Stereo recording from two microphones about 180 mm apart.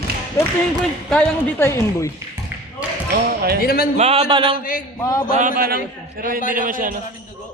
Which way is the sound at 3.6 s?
55° left (ahead or behind).